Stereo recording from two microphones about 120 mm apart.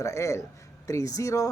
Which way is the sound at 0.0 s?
25° left (ahead or behind).